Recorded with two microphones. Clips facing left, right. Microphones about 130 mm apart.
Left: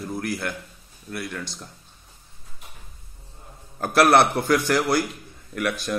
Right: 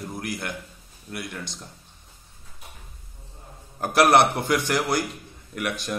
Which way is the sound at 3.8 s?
15° right (ahead or behind).